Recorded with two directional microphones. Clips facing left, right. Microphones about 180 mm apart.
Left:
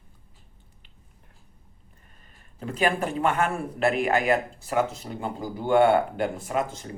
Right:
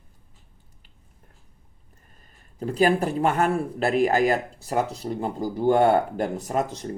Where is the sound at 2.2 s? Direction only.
35° right (ahead or behind).